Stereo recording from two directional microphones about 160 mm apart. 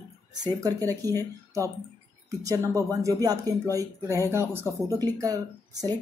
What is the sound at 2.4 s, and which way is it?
Speech, 20° right (ahead or behind).